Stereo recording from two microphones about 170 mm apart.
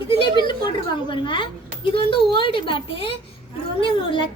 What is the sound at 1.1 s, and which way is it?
A woman's voice, 30° left (ahead or behind).